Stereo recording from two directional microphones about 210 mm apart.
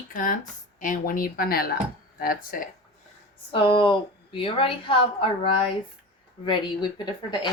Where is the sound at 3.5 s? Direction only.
25° left (ahead or behind).